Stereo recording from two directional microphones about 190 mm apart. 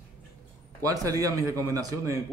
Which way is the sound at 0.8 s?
15° right (ahead or behind).